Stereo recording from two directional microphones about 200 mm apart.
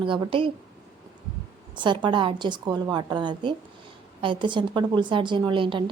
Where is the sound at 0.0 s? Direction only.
25° right (ahead or behind).